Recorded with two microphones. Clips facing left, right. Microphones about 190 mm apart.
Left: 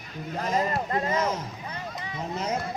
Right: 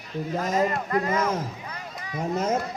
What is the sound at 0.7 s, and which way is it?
Speech, 25° left (ahead or behind).